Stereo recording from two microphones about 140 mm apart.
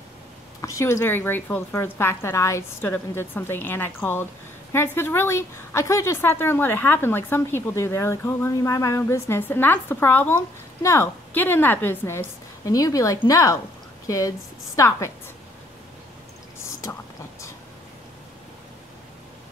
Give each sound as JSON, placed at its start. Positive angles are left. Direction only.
{"t": 0.6, "sound": "a woman's voice", "side_deg": 20}